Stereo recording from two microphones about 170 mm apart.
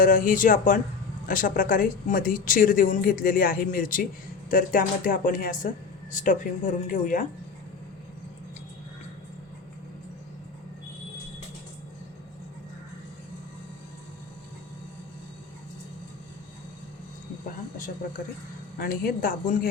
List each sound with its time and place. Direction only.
0.0 s speech: 55° left (ahead or behind)
18.8 s a woman's voice: 60° left (ahead or behind)